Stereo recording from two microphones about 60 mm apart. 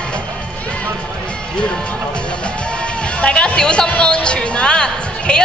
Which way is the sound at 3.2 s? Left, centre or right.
Centre.